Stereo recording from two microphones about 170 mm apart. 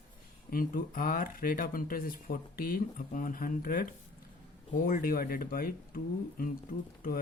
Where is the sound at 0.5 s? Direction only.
55° left (ahead or behind).